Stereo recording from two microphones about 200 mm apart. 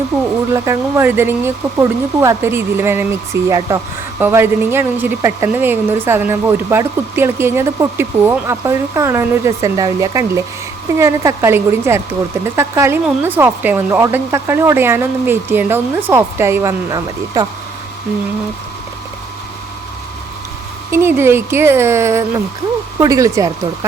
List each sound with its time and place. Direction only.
0.5 s a woman's voice: 15° right (ahead or behind)
20.9 s a woman's voice: 10° right (ahead or behind)